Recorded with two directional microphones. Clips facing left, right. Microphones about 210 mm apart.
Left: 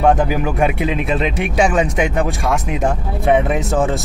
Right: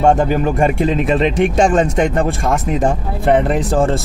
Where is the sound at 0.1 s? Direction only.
5° left (ahead or behind).